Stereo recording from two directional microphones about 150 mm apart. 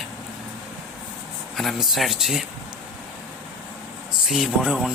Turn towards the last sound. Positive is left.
turn(degrees=-5)  # may be behind; listen again after turning